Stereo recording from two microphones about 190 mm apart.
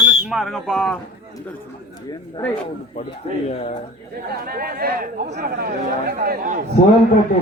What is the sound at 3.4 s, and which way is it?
Speech, 35° left (ahead or behind).